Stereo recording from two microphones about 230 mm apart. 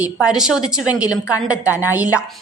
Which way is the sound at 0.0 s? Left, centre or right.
Centre.